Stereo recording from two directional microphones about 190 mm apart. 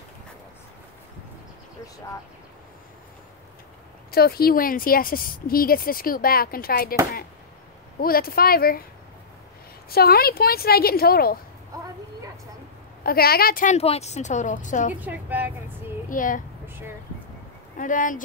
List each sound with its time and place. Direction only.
4.1 s speech: 55° left (ahead or behind)
8.0 s speech: 50° left (ahead or behind)
9.8 s speech: 55° left (ahead or behind)
13.0 s speech: 55° left (ahead or behind)
13.7 s speech: 35° left (ahead or behind)
15.0 s a woman's voice: 10° right (ahead or behind)
16.1 s a woman's voice: 45° left (ahead or behind)
16.6 s a sound: 10° right (ahead or behind)
17.7 s speech: 45° left (ahead or behind)